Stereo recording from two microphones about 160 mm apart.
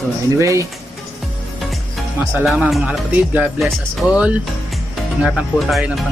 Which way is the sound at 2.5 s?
5° right (ahead or behind).